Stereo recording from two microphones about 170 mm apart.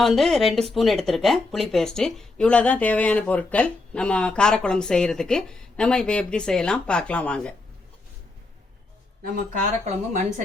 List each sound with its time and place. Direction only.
0.0 s speech: centre (ahead or behind)
9.2 s speech: 50° right (ahead or behind)